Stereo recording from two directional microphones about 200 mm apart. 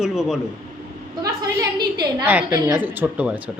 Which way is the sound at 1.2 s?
20° right (ahead or behind).